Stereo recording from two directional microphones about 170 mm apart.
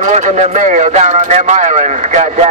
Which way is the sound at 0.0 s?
45° right (ahead or behind).